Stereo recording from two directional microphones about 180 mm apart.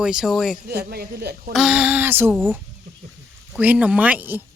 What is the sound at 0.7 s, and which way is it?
Speech, 60° right (ahead or behind).